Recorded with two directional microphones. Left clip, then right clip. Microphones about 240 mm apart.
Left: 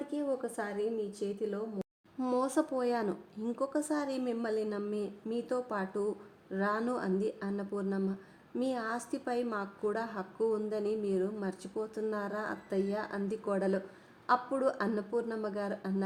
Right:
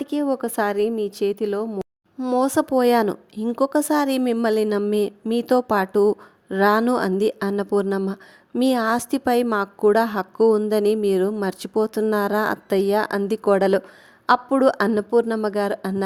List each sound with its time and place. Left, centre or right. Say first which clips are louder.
0.0 s a woman's voice: right 11 dB; right
2.1 s speech: right 10 dB; right
2.4 s a woman's voice: right 15 dB; right